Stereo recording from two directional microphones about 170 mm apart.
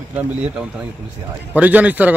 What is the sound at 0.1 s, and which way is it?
A man's voice, 5° right (ahead or behind).